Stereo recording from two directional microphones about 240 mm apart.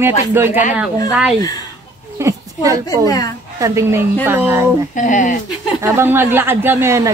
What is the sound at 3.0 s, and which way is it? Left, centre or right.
Speech, centre.